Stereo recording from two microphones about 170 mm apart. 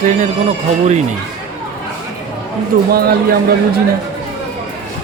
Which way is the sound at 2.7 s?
55° right (ahead or behind).